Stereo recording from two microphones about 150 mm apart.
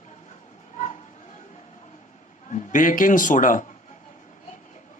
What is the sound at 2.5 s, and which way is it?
A man's voice, 60° left (ahead or behind).